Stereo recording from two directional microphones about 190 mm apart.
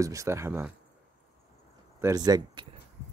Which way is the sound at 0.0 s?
15° right (ahead or behind).